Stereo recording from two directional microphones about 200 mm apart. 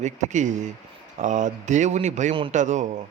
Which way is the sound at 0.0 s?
35° right (ahead or behind).